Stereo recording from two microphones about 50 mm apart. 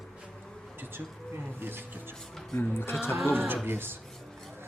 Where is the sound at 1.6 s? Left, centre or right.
Right.